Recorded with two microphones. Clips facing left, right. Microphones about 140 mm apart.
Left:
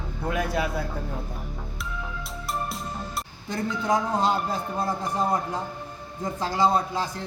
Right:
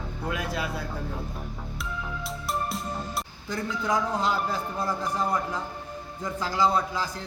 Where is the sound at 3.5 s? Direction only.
30° left (ahead or behind).